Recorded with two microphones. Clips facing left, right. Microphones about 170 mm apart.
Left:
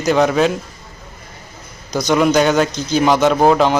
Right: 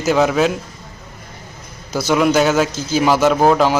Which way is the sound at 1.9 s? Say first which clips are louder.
Left 1 dB; 5° right (ahead or behind).